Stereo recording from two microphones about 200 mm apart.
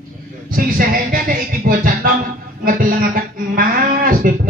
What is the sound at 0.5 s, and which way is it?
Music, 45° right (ahead or behind).